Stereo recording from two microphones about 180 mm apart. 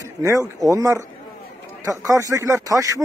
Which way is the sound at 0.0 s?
20° right (ahead or behind).